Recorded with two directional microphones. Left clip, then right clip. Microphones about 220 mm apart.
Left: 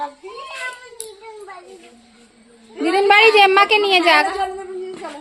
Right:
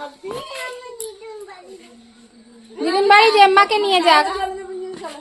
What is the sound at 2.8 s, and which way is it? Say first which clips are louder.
A woman's voice: even; 15° left (ahead or behind).